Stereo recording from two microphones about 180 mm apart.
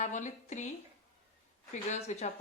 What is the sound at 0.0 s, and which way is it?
Speech, 40° left (ahead or behind).